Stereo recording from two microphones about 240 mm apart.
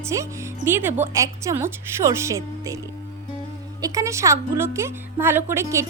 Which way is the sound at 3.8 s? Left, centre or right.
Centre.